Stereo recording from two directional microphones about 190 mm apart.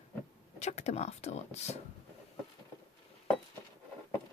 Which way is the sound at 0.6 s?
35° left (ahead or behind).